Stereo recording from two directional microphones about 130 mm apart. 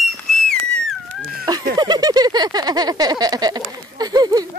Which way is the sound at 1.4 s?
35° right (ahead or behind).